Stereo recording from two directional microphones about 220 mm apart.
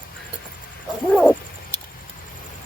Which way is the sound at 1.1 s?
5° left (ahead or behind).